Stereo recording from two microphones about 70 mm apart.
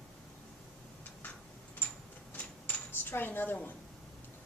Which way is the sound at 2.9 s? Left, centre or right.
Left.